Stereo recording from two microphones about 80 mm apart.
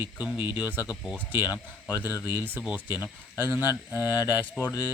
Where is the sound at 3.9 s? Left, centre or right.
Left.